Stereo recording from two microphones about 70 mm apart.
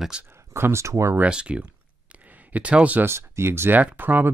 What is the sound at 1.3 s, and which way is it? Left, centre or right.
Speech, centre.